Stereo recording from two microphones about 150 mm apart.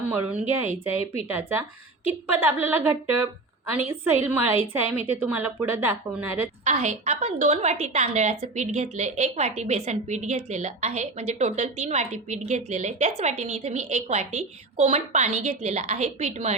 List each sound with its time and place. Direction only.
0.1 s a woman's voice: 10° right (ahead or behind)
6.7 s a woman's voice: 45° right (ahead or behind)